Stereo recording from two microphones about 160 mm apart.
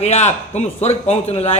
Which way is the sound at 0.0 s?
45° left (ahead or behind).